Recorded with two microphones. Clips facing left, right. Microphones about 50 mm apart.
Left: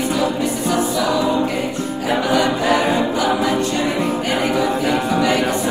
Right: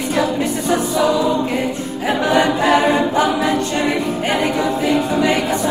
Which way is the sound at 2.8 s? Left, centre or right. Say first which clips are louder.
Right 3 dB; right.